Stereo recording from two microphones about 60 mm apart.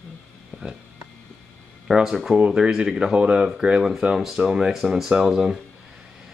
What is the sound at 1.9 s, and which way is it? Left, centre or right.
Speech, centre.